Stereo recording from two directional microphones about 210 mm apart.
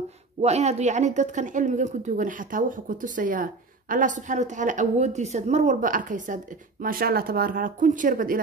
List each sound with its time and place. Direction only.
0.4 s a woman's voice: 30° right (ahead or behind)